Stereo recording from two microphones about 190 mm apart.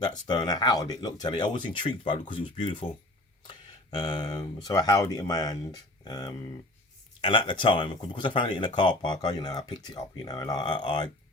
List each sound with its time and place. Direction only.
0.0 s speech: 20° left (ahead or behind)
3.9 s speech: 20° left (ahead or behind)